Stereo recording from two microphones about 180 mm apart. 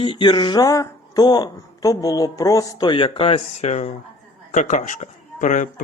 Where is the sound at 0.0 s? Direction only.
30° left (ahead or behind).